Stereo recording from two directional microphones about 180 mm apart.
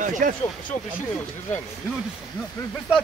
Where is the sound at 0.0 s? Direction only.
45° right (ahead or behind).